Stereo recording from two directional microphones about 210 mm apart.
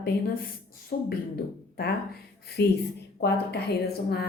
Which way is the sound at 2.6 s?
50° left (ahead or behind).